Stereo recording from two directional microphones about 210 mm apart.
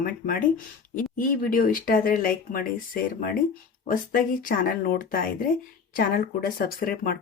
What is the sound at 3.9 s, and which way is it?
Speech, 40° left (ahead or behind).